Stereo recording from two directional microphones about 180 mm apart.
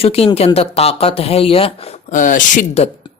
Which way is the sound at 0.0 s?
35° left (ahead or behind).